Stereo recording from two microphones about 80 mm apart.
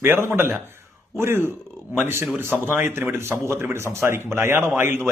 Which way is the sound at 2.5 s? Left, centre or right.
Right.